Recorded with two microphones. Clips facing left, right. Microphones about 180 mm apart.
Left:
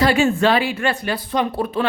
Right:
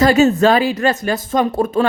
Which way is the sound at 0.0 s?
40° right (ahead or behind).